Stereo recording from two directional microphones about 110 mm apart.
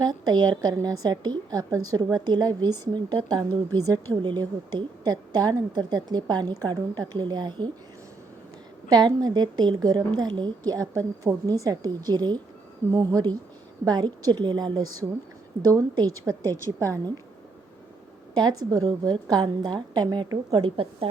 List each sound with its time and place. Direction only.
0.0 s speech: 40° right (ahead or behind)
8.9 s speech: 40° right (ahead or behind)
18.3 s speech: 40° right (ahead or behind)
20.7 s a woman's voice: 55° right (ahead or behind)